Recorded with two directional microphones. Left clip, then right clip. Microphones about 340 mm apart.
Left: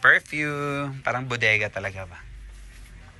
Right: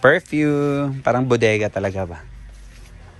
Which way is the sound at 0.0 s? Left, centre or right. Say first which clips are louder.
Right 3 dB; centre.